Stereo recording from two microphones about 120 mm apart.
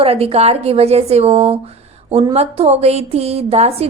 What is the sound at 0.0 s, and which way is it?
A woman's voice, 55° right (ahead or behind).